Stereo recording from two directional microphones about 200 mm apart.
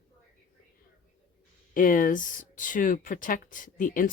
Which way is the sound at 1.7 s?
45° left (ahead or behind).